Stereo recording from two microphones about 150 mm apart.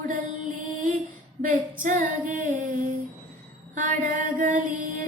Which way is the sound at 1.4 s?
60° right (ahead or behind).